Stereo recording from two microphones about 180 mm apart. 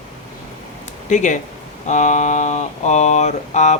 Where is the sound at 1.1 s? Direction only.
45° left (ahead or behind).